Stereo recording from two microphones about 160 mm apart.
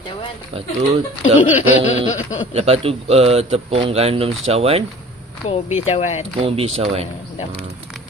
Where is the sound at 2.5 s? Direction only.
40° right (ahead or behind).